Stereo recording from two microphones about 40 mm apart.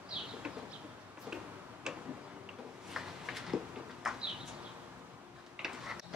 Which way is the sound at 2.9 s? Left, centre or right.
Centre.